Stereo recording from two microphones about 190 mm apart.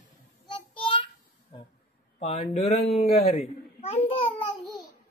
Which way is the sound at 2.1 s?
35° left (ahead or behind).